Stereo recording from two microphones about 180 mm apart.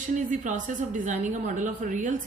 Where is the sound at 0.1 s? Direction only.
45° right (ahead or behind).